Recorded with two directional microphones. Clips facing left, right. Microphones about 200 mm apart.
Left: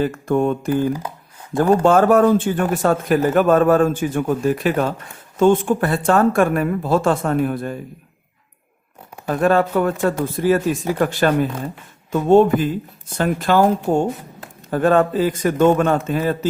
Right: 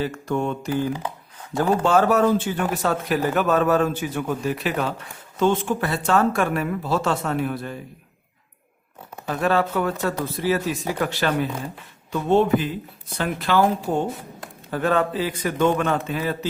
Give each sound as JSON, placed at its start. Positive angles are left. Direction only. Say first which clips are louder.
{"t": 0.0, "sound": "speech", "louder": "left 6 dB", "side_deg": 50}
{"t": 9.2, "sound": "speech", "louder": "left 5 dB", "side_deg": 50}